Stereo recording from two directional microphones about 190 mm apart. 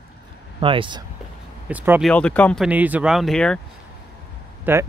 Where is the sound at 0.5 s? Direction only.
25° right (ahead or behind).